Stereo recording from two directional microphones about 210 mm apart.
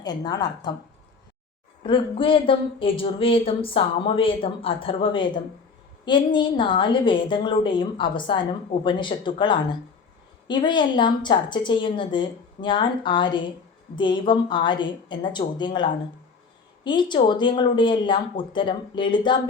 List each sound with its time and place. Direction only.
0.0 s a woman's voice: 20° left (ahead or behind)
1.9 s a woman's voice: 25° left (ahead or behind)